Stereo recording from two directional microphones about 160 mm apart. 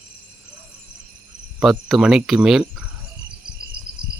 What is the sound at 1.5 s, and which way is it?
Speech, 5° right (ahead or behind).